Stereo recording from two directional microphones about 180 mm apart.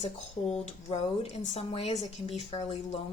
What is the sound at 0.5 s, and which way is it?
Speech, 35° left (ahead or behind).